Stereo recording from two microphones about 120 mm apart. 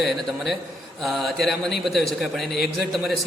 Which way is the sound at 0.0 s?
Centre (ahead or behind).